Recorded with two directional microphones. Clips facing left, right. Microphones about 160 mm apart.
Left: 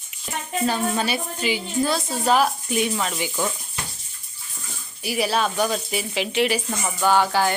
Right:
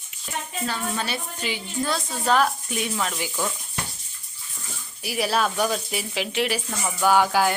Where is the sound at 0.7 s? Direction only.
15° left (ahead or behind).